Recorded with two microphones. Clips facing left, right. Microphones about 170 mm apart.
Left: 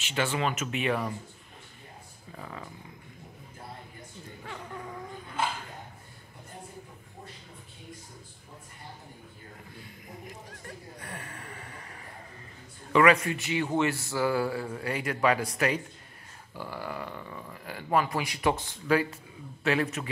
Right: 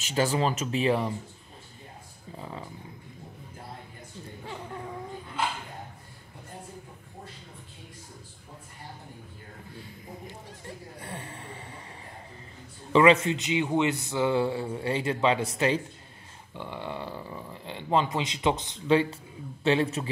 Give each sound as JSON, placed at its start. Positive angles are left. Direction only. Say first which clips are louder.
{"t": 0.0, "sound": "speech", "louder": "right 3 dB", "side_deg": -40}
{"t": 2.3, "sound": "speech", "louder": "right 2 dB", "side_deg": -25}
{"t": 10.2, "sound": "a sound", "louder": "right 2 dB", "side_deg": -30}
{"t": 12.9, "sound": "speech", "louder": "right 2 dB", "side_deg": -25}
{"t": 16.5, "sound": "a sound", "louder": "right 1 dB", "side_deg": -20}
{"t": 17.5, "sound": "speech", "louder": "right 2 dB", "side_deg": -25}